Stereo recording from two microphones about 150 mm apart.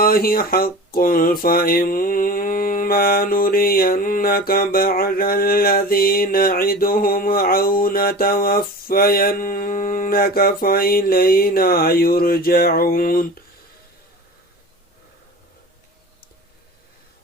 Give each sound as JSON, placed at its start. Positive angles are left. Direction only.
{"t": 0.0, "sound": "speech", "side_deg": 80}